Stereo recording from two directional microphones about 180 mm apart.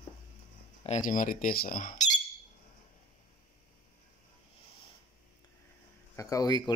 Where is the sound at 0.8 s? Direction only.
40° left (ahead or behind).